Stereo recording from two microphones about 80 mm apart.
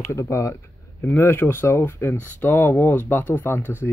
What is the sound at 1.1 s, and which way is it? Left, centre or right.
Speech, left.